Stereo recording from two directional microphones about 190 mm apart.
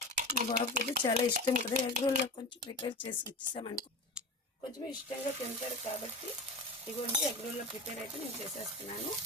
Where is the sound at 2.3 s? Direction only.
25° left (ahead or behind).